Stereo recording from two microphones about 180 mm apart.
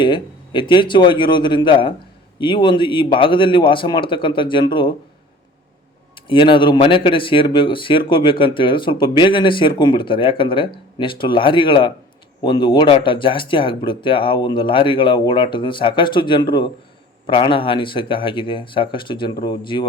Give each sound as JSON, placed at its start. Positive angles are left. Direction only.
{"t": 0.0, "sound": "speech", "side_deg": 25}
{"t": 6.2, "sound": "speech", "side_deg": 30}